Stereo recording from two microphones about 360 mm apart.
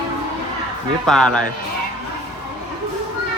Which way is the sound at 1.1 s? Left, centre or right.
Centre.